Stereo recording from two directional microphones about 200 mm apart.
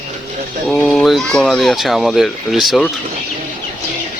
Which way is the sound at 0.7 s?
5° left (ahead or behind).